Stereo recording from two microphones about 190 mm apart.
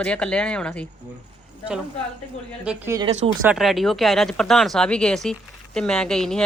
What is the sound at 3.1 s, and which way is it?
Speech, 35° right (ahead or behind).